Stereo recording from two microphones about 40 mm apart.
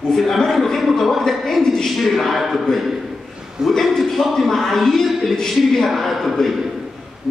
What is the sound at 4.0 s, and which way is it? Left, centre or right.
A man's voice, centre.